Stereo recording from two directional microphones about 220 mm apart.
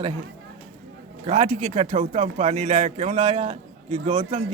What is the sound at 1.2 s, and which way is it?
Speech, 30° right (ahead or behind).